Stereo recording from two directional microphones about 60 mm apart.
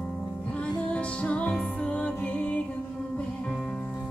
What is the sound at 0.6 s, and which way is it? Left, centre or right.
Music, centre.